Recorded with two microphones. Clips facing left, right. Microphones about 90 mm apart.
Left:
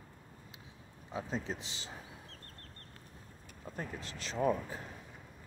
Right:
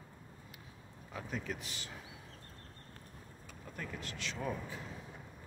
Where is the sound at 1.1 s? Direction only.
25° left (ahead or behind).